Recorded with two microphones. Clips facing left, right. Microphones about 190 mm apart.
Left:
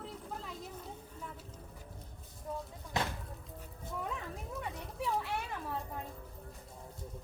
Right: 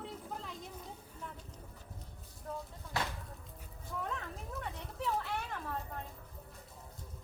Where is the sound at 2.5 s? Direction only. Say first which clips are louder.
Left 2 dB; 10° left (ahead or behind).